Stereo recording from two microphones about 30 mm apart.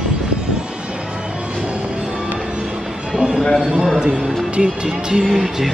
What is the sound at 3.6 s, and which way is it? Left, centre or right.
Speech, right.